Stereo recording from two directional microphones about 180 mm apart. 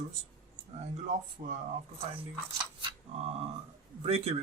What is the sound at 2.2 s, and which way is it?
Speech, 25° right (ahead or behind).